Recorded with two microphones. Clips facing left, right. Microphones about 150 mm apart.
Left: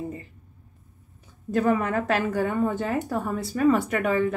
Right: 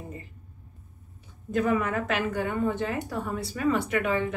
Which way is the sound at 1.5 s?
35° left (ahead or behind).